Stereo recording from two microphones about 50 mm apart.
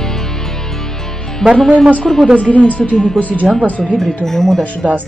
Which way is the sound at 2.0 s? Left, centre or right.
Centre.